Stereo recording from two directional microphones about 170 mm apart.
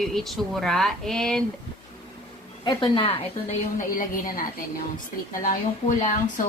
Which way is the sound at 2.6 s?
30° left (ahead or behind).